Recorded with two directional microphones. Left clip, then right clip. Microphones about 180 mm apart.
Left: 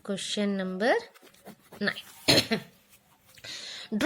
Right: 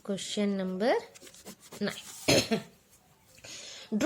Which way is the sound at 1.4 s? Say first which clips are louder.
Left 2 dB; centre (ahead or behind).